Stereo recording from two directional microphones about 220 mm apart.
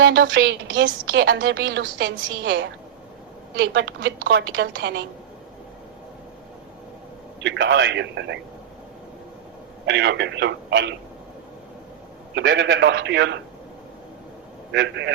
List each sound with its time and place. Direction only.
0.0 s a woman's voice: 55° right (ahead or behind)
7.4 s speech: 55° right (ahead or behind)
9.8 s speech: 50° right (ahead or behind)
12.3 s speech: 55° right (ahead or behind)
14.7 s speech: 50° right (ahead or behind)